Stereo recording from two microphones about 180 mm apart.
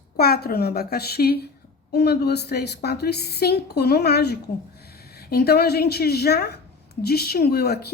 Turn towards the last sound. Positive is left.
turn(degrees=60)  # may be behind; listen again after turning